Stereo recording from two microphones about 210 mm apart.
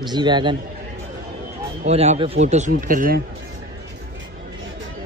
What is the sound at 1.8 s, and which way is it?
Speech, 30° right (ahead or behind).